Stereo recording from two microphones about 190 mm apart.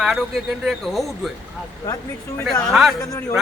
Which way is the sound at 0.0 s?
Centre (ahead or behind).